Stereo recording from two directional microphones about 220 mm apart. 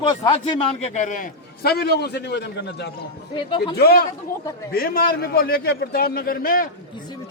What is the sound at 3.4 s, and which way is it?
Speech, 20° left (ahead or behind).